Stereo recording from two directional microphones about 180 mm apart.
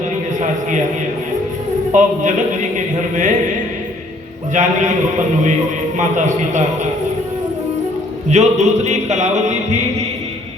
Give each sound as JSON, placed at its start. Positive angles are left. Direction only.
{"t": 1.9, "sound": "a man's voice", "side_deg": -45}
{"t": 4.5, "sound": "a man's voice", "side_deg": -40}
{"t": 8.3, "sound": "a sound", "side_deg": -40}